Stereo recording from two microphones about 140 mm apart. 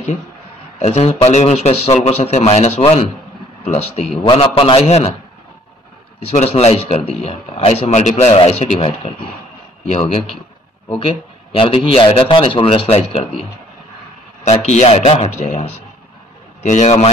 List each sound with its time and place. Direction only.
0.7 s speech: 50° left (ahead or behind)
4.2 s a man's voice: 35° left (ahead or behind)
6.2 s speech: 50° left (ahead or behind)
10.9 s a man's voice: 40° left (ahead or behind)
14.4 s a man's voice: 50° left (ahead or behind)